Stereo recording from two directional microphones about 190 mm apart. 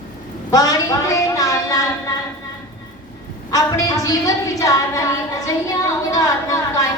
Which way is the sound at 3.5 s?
15° left (ahead or behind).